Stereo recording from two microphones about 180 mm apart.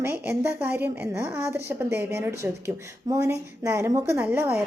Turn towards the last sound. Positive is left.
turn(degrees=-10)  # may be behind; listen again after turning